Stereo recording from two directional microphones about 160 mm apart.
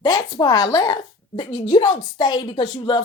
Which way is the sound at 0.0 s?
25° left (ahead or behind).